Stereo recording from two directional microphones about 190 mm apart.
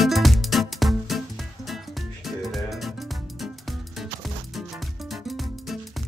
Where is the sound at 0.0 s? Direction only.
Centre (ahead or behind).